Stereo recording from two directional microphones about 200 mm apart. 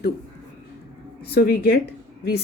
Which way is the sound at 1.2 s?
50° left (ahead or behind).